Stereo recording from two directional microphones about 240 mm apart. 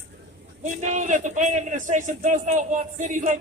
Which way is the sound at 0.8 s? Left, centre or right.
Right.